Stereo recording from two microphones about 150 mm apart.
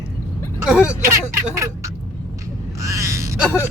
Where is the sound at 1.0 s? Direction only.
20° right (ahead or behind).